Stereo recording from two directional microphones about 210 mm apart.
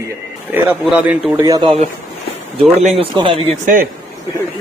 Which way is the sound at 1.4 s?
15° right (ahead or behind).